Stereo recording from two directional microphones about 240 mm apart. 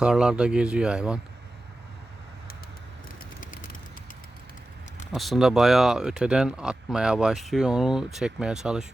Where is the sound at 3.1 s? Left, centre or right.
Left.